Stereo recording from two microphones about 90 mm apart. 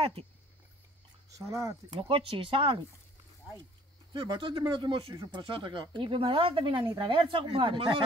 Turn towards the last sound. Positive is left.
turn(degrees=-70)  # may be behind; listen again after turning